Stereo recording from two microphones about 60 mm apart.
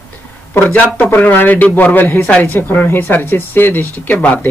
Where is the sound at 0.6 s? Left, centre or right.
Left.